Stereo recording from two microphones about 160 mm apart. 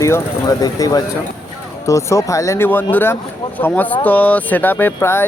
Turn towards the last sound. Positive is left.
turn(degrees=15)  # may be behind; listen again after turning